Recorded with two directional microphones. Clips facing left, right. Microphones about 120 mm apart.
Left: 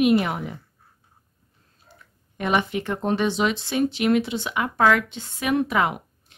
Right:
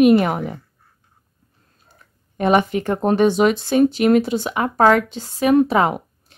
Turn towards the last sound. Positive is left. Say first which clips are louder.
# right 5 dB
turn(degrees=-35)  # may be behind; listen again after turning